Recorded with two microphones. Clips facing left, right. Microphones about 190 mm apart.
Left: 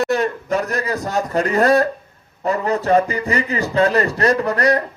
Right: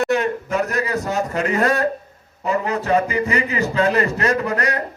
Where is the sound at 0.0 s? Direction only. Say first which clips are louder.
Even; 35° left (ahead or behind).